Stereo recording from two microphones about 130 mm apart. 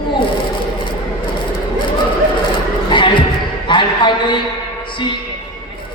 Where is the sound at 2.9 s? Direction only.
40° left (ahead or behind).